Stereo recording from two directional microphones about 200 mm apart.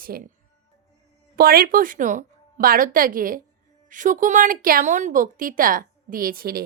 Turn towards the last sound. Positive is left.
turn(degrees=-50)  # may be behind; listen again after turning